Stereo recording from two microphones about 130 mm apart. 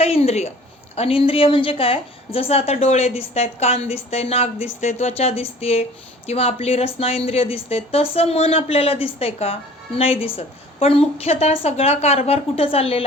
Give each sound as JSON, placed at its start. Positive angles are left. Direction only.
{"t": 0.0, "sound": "a woman's voice", "side_deg": 50}